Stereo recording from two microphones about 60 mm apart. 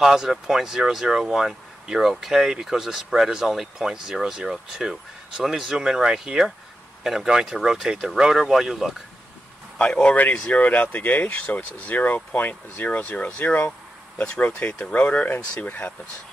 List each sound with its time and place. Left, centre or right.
0.0 s speech: centre
9.8 s speech: left